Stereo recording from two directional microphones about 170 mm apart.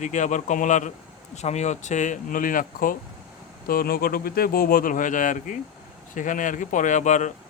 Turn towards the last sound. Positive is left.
turn(degrees=45)  # may be behind; listen again after turning